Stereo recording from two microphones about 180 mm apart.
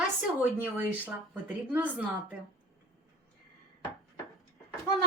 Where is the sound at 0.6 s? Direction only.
10° right (ahead or behind).